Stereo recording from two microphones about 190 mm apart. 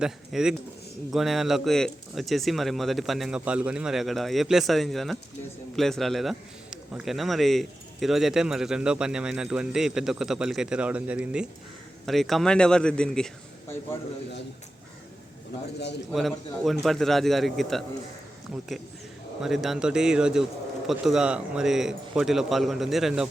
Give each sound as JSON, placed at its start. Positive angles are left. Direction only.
{"t": 0.0, "sound": "a man's voice", "side_deg": -5}
{"t": 16.1, "sound": "a man's voice", "side_deg": 0}
{"t": 19.4, "sound": "a man's voice", "side_deg": 0}